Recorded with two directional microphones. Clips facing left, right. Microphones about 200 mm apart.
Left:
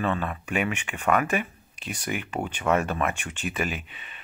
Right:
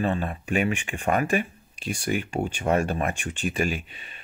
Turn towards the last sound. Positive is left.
turn(degrees=-40)  # may be behind; listen again after turning